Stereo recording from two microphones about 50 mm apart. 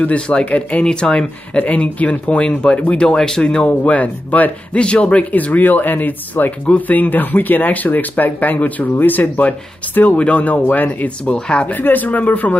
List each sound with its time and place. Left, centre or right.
0.0 s speech: left
3.6 s speech: left
11.3 s speech: centre
11.6 s speech: left